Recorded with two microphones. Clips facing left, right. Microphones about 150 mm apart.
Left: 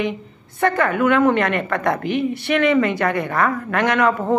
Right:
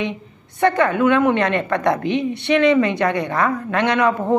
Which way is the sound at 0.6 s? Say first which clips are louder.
Right 2 dB; 25° right (ahead or behind).